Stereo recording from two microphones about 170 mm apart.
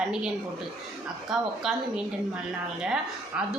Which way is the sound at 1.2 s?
Centre (ahead or behind).